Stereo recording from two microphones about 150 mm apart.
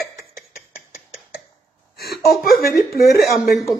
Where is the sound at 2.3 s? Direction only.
Centre (ahead or behind).